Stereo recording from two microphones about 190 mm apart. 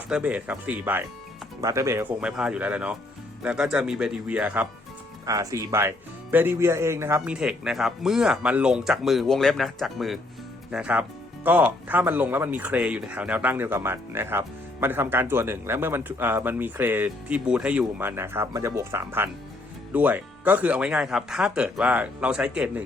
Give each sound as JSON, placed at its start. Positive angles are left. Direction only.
{"t": 0.1, "sound": "speech", "side_deg": -5}
{"t": 7.2, "sound": "speech", "side_deg": -5}